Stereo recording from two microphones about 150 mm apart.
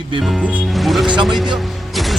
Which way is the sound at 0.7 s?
Centre (ahead or behind).